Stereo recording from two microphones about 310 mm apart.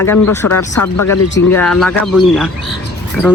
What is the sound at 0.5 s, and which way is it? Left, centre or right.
Speech, left.